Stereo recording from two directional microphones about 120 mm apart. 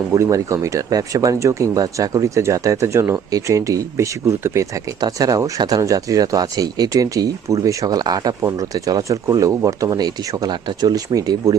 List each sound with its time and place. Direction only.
0.1 s speech: 30° right (ahead or behind)